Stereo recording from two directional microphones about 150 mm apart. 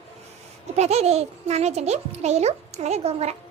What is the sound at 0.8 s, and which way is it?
A child's voice, 45° right (ahead or behind).